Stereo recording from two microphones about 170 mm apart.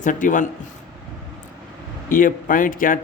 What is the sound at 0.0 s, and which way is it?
Speech, 50° left (ahead or behind).